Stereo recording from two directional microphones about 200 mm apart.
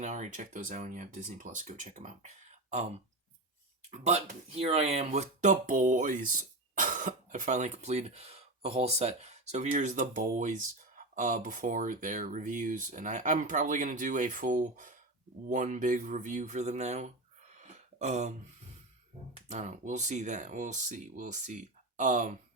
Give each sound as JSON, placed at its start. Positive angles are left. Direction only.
{"t": 0.0, "sound": "speech", "side_deg": -35}
{"t": 17.6, "sound": "a sound", "side_deg": -35}
{"t": 19.5, "sound": "speech", "side_deg": -35}